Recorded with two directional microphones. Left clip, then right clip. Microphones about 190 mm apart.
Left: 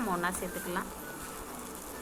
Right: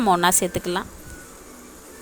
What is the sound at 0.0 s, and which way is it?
Speech, 65° right (ahead or behind).